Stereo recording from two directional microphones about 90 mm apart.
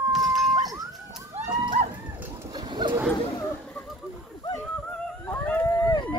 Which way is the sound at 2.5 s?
55° right (ahead or behind).